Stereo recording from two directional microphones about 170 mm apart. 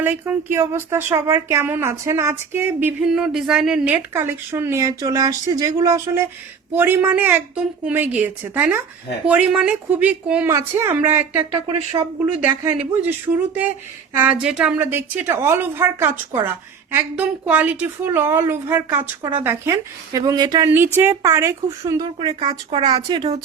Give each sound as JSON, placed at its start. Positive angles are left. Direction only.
{"t": 0.0, "sound": "speech", "side_deg": -10}
{"t": 12.0, "sound": "speech", "side_deg": -30}
{"t": 12.4, "sound": "speech", "side_deg": -10}
{"t": 20.7, "sound": "speech", "side_deg": -15}
{"t": 22.2, "sound": "speech", "side_deg": -35}